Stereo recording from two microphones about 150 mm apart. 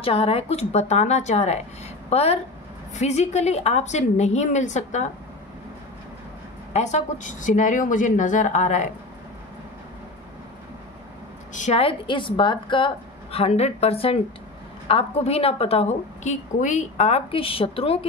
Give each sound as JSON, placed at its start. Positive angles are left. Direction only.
{"t": 0.0, "sound": "a woman's voice", "side_deg": 40}
{"t": 6.7, "sound": "speech", "side_deg": 50}
{"t": 11.5, "sound": "a woman's voice", "side_deg": 55}
{"t": 11.8, "sound": "a woman's voice", "side_deg": 35}